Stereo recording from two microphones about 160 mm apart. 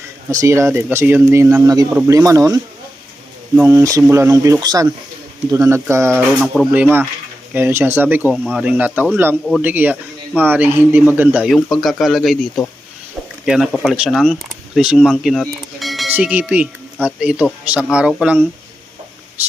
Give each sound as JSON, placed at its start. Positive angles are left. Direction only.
{"t": 0.3, "sound": "a man's voice", "side_deg": -20}
{"t": 6.4, "sound": "speech", "side_deg": 0}
{"t": 7.5, "sound": "a man's voice", "side_deg": -15}
{"t": 16.1, "sound": "a man's voice", "side_deg": -10}